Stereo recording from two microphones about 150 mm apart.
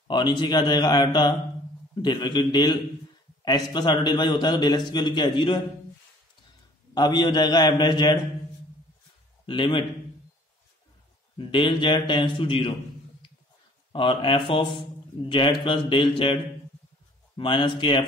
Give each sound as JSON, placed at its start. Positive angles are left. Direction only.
{"t": 0.1, "sound": "a man's voice", "side_deg": 30}
{"t": 6.9, "sound": "a man's voice", "side_deg": 30}
{"t": 9.5, "sound": "a man's voice", "side_deg": 35}
{"t": 11.3, "sound": "a man's voice", "side_deg": 35}
{"t": 13.9, "sound": "a man's voice", "side_deg": 35}
{"t": 17.4, "sound": "a man's voice", "side_deg": 35}